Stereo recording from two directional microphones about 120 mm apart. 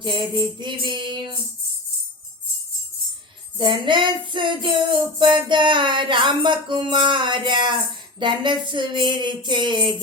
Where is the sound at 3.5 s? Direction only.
40° right (ahead or behind).